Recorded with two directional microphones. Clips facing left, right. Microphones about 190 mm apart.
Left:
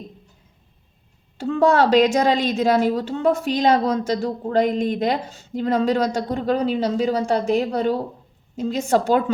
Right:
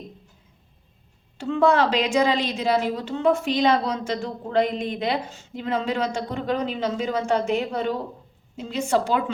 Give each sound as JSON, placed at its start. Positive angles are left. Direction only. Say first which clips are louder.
{"t": 1.4, "sound": "a woman's voice", "louder": "left 2 dB", "side_deg": 40}